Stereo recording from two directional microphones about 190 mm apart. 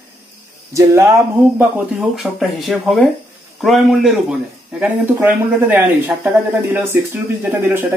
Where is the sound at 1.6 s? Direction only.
5° right (ahead or behind).